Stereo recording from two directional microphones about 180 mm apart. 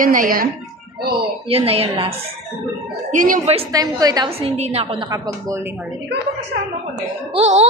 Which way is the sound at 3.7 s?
20° right (ahead or behind).